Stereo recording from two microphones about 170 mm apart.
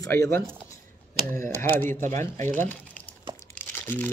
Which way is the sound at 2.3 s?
45° right (ahead or behind).